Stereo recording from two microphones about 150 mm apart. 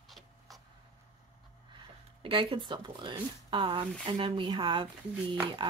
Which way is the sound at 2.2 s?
35° right (ahead or behind).